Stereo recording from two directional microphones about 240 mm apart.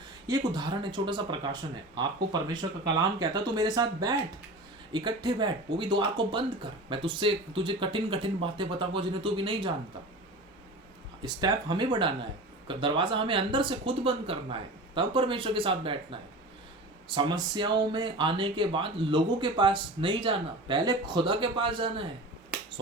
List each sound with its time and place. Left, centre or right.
0.3 s speech: centre
11.2 s speech: centre
17.1 s speech: centre